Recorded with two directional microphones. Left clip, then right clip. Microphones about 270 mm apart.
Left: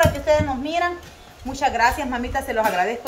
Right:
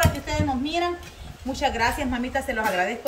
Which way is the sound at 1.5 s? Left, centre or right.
Centre.